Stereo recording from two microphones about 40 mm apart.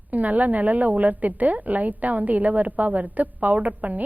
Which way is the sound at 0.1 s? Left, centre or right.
Right.